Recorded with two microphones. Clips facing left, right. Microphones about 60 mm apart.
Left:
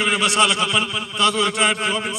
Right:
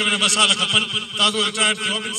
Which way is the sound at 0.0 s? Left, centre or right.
Left.